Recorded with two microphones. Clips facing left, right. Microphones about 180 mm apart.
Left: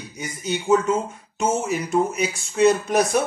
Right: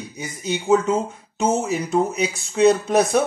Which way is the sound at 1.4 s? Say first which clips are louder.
Right 2 dB; 30° right (ahead or behind).